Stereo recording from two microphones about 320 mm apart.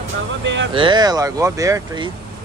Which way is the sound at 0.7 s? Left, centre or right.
Centre.